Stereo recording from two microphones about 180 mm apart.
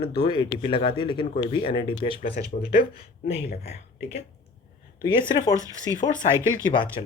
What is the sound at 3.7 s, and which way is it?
Speech, 40° left (ahead or behind).